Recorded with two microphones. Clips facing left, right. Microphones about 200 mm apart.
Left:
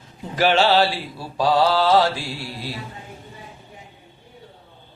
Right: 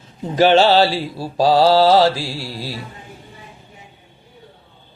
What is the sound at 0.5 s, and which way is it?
Mantra, 30° right (ahead or behind).